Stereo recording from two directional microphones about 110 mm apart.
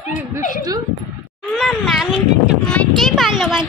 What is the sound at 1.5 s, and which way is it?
Speech, centre (ahead or behind).